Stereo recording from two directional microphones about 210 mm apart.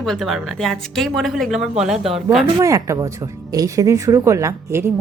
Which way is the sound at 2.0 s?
30° right (ahead or behind).